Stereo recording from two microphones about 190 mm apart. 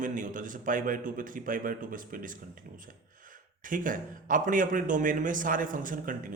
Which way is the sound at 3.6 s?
45° right (ahead or behind).